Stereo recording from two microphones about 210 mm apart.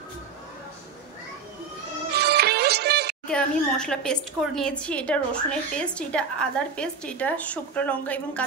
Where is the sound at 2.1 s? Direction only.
50° right (ahead or behind).